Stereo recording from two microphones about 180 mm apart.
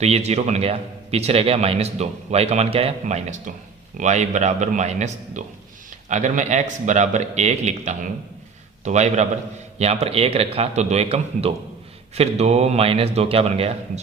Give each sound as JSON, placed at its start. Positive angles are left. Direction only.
{"t": 0.0, "sound": "a man's voice", "side_deg": -35}